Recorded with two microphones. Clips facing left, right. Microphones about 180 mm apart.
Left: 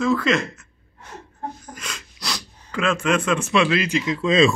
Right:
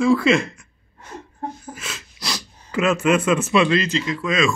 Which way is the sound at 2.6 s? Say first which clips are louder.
Right 3 dB; 5° right (ahead or behind).